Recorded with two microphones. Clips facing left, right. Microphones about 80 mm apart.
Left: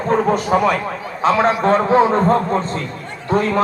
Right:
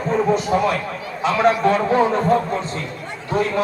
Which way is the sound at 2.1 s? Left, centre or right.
Left.